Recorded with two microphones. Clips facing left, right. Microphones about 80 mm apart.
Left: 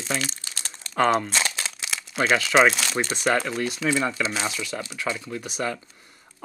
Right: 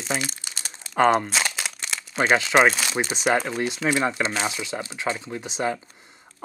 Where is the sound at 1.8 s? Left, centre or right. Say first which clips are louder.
Even; centre.